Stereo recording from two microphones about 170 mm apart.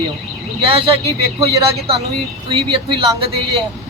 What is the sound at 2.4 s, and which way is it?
Speech, 30° right (ahead or behind).